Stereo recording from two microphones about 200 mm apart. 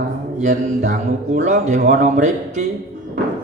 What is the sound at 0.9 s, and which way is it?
Speech, 35° right (ahead or behind).